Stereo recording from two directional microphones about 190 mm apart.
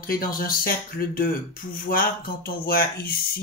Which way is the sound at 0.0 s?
50° left (ahead or behind).